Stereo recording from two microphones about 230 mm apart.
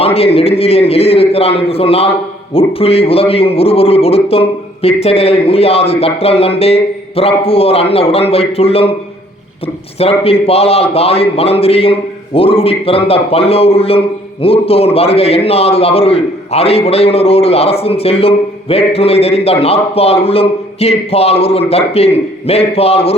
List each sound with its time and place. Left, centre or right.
0.0 s a man's voice: left
10.0 s a man's voice: left